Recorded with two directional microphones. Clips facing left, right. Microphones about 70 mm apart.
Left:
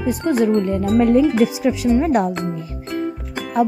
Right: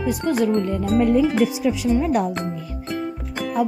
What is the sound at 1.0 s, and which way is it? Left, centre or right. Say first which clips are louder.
Music: left 3 dB; left.